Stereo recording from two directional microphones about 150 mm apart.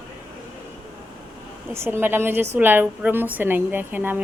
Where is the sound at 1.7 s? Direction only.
15° right (ahead or behind).